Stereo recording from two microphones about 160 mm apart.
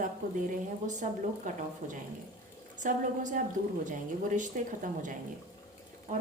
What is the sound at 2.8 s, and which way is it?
A woman's voice, 55° right (ahead or behind).